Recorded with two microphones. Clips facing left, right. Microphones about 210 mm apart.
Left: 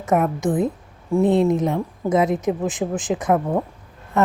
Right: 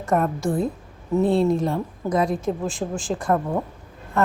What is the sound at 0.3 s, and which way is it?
A woman's voice, 20° left (ahead or behind).